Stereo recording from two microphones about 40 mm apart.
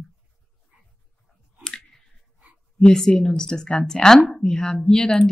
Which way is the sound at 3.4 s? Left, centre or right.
Centre.